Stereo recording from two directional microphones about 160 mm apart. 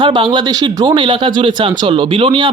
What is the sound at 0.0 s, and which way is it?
Speech, 30° right (ahead or behind).